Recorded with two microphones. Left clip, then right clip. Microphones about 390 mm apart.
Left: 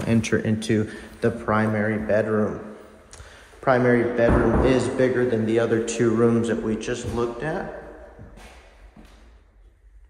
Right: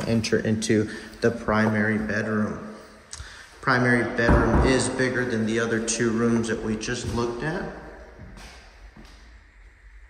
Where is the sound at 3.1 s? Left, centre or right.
Centre.